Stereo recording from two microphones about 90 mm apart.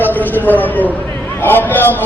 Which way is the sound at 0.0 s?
20° left (ahead or behind).